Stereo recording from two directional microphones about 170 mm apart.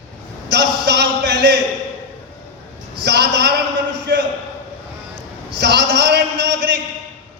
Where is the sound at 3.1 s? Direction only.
75° right (ahead or behind).